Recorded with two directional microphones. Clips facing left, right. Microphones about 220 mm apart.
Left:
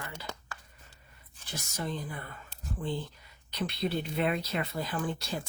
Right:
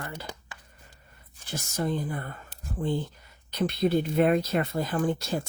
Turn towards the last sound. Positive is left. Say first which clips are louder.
# right 7 dB
turn(degrees=-45)  # may be behind; listen again after turning